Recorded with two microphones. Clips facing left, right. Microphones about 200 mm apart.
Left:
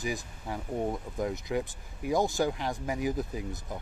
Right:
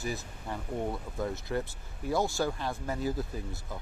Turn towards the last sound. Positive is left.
turn(degrees=15)  # may be behind; listen again after turning